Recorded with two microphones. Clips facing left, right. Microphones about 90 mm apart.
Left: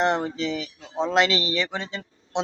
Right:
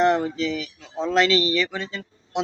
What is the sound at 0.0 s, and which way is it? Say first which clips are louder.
Speech: right 3 dB; 20° left (ahead or behind).